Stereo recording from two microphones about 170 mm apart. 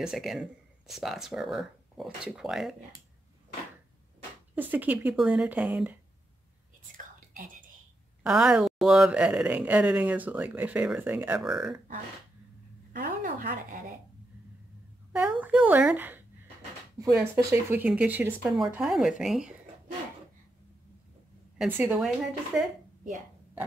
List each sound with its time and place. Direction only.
0.0 s speech: centre (ahead or behind)
4.6 s speech: 10° right (ahead or behind)
7.3 s whispering: 55° right (ahead or behind)
8.2 s speech: 5° right (ahead or behind)
12.9 s a woman's voice: 50° right (ahead or behind)
15.1 s a woman's voice: 10° right (ahead or behind)
21.5 s speech: 10° right (ahead or behind)